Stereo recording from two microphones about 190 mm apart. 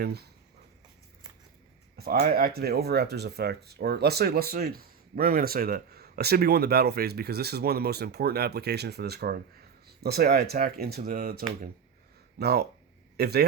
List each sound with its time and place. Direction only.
0.0 s speech: 55° right (ahead or behind)
2.0 s speech: 50° right (ahead or behind)